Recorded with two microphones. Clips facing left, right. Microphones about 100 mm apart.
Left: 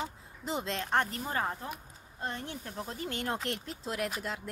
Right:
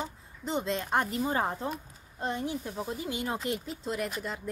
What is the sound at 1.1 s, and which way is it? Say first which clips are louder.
Speech: right 5 dB; 20° right (ahead or behind).